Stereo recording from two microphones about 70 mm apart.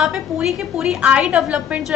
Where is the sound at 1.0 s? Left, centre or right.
Centre.